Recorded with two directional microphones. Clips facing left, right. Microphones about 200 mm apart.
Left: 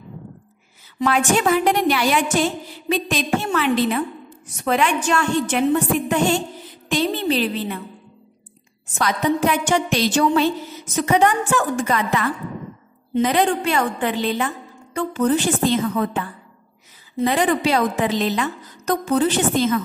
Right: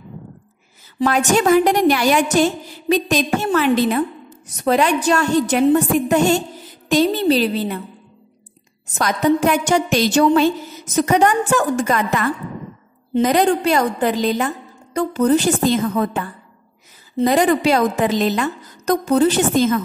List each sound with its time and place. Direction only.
0.9 s a woman's voice: 40° right (ahead or behind)
8.9 s a woman's voice: 45° right (ahead or behind)